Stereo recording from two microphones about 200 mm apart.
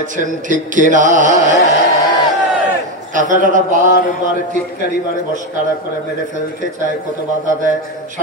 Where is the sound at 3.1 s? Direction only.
40° right (ahead or behind).